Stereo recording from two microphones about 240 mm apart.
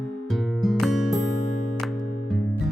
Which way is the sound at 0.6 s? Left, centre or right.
Centre.